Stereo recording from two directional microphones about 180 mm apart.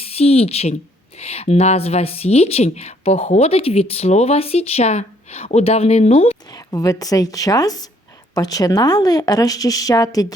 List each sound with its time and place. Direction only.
0.0 s a woman's voice: 35° left (ahead or behind)
6.5 s a woman's voice: 20° left (ahead or behind)